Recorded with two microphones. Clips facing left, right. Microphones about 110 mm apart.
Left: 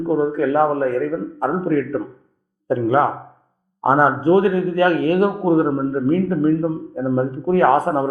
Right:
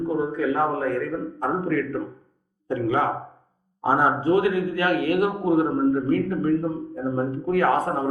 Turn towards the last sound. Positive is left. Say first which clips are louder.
# left 6 dB
turn(degrees=30)  # may be behind; listen again after turning